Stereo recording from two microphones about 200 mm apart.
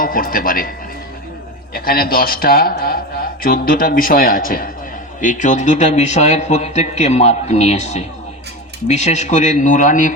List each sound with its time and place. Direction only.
0.0 s speech: 45° left (ahead or behind)
1.7 s speech: 45° left (ahead or behind)